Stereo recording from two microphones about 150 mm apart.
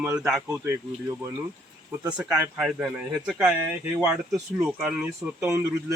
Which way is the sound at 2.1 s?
5° right (ahead or behind).